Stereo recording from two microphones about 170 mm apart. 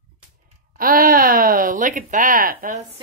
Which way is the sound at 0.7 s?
60° right (ahead or behind).